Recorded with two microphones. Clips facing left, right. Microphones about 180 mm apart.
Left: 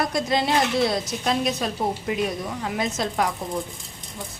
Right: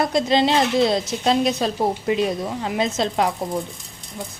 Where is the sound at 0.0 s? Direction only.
25° right (ahead or behind).